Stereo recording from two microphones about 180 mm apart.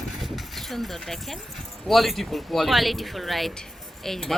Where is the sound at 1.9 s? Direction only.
Centre (ahead or behind).